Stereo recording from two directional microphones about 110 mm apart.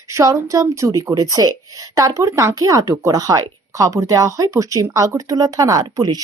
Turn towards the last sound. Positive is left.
turn(degrees=-35)  # may be behind; listen again after turning